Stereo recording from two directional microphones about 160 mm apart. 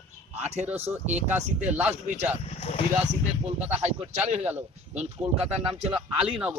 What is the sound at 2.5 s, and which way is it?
Speech, 40° left (ahead or behind).